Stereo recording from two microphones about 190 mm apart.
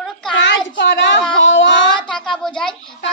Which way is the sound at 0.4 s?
70° left (ahead or behind).